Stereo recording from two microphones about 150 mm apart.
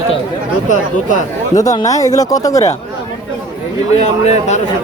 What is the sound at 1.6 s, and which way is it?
Speech, 25° left (ahead or behind).